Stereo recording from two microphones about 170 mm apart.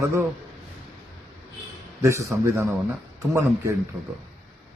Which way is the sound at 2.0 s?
15° right (ahead or behind).